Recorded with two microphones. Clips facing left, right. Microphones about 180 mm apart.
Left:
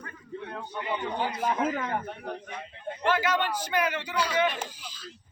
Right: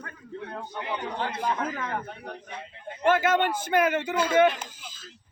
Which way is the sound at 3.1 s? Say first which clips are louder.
Right 4 dB; 50° right (ahead or behind).